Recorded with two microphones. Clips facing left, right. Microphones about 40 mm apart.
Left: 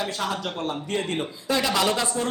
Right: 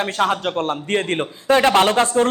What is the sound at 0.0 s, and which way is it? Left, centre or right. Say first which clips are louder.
A man's voice: right 8 dB; right.